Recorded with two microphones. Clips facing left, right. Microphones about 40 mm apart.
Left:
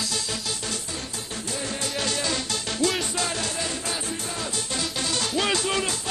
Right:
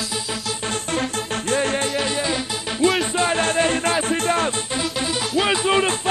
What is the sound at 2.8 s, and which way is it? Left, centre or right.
Music, right.